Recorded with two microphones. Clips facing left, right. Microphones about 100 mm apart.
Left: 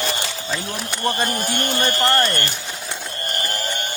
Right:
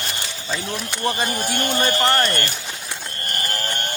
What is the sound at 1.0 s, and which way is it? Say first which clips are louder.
Speech: left 1 dB; 5° right (ahead or behind).